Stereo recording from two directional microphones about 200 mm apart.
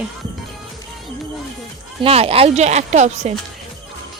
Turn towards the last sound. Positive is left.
turn(degrees=-35)  # may be behind; listen again after turning